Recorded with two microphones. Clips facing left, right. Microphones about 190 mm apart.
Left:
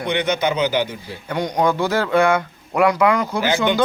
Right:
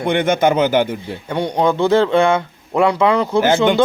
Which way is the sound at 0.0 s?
50° right (ahead or behind).